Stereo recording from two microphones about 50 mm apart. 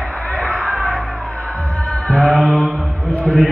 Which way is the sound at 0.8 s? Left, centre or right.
Centre.